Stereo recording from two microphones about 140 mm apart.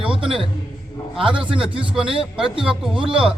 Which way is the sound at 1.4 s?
40° right (ahead or behind).